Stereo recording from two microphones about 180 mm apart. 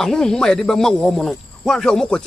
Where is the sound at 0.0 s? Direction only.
5° left (ahead or behind).